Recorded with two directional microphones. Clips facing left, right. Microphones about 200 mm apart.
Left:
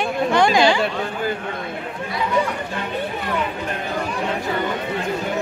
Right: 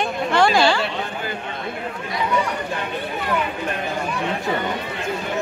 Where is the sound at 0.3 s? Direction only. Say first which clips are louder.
Left 1 dB; 15° left (ahead or behind).